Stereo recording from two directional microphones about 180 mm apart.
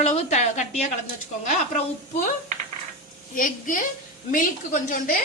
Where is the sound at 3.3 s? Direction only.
50° left (ahead or behind).